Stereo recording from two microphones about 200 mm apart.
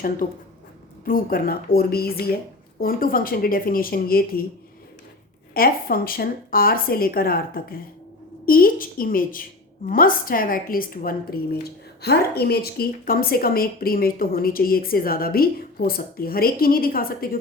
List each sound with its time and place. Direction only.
0.2 s a woman's voice: 40° left (ahead or behind)
5.5 s a woman's voice: 45° left (ahead or behind)